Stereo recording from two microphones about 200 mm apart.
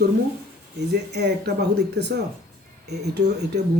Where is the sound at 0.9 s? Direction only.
55° right (ahead or behind).